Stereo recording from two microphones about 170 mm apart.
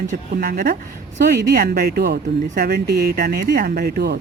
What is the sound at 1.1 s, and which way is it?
Speech, 50° right (ahead or behind).